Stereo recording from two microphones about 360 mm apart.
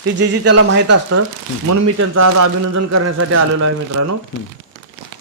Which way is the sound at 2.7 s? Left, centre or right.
Right.